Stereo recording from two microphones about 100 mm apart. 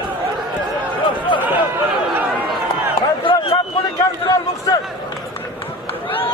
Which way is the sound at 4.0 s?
40° left (ahead or behind).